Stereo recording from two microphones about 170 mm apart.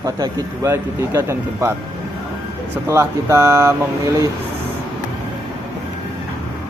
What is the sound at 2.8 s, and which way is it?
Mantra, 15° right (ahead or behind).